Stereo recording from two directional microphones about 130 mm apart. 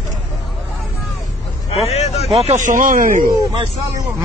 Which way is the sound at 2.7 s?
90° right.